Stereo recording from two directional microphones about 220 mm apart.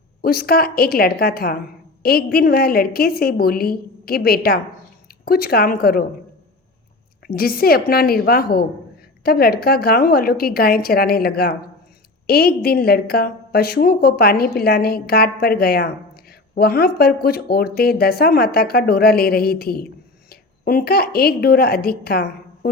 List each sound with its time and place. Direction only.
0.2 s a woman's voice: 45° left (ahead or behind)
7.3 s a woman's voice: 45° left (ahead or behind)